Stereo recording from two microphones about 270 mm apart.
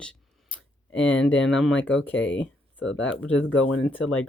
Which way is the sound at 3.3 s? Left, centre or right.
Left.